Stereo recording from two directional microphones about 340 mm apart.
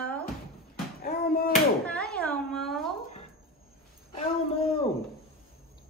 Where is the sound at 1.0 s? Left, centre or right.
Left.